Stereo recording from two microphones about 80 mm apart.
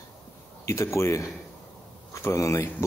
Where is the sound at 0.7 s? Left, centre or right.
Left.